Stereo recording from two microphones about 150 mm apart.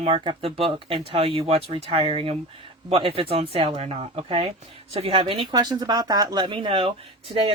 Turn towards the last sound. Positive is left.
turn(degrees=-35)  # may be behind; listen again after turning